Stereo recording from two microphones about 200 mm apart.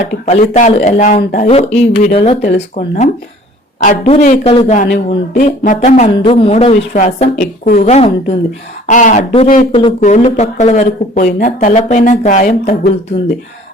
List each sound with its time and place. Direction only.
0.5 s speech: 35° left (ahead or behind)
4.9 s speech: 50° left (ahead or behind)